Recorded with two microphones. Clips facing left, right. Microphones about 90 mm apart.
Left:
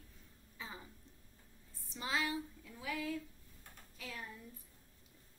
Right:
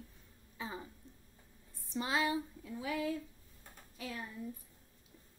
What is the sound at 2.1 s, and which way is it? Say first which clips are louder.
A woman's voice: right 3 dB; 20° right (ahead or behind).